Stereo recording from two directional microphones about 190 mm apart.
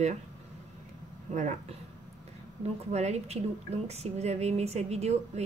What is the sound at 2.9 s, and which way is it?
Speech, 35° right (ahead or behind).